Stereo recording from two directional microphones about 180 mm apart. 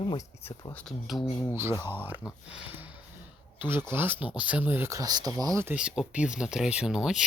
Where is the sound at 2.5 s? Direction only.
10° right (ahead or behind).